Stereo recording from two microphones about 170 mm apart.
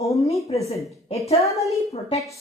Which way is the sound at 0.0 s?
20° left (ahead or behind).